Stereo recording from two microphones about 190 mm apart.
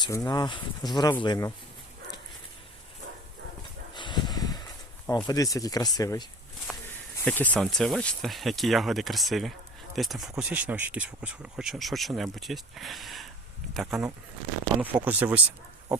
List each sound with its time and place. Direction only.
0.0 s speech: 20° left (ahead or behind)
3.9 s a sound: 25° left (ahead or behind)
5.1 s speech: 20° left (ahead or behind); by 15.4 s 10° right (ahead or behind)